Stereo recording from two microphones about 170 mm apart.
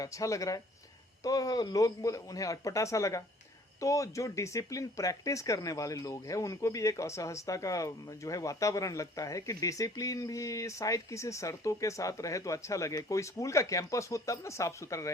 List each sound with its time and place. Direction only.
0.0 s speech: 20° left (ahead or behind)